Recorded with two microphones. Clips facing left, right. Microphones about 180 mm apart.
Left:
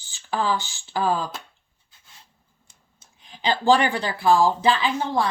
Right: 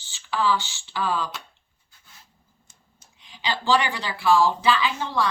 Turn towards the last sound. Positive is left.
turn(degrees=35)  # may be behind; listen again after turning